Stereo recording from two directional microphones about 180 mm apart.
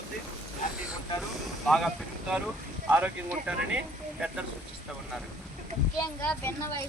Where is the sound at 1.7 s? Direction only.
Centre (ahead or behind).